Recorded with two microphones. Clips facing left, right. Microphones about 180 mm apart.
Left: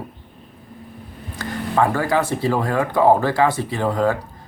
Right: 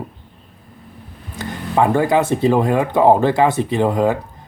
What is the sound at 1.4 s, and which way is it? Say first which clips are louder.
Speech: right 2 dB; 20° right (ahead or behind).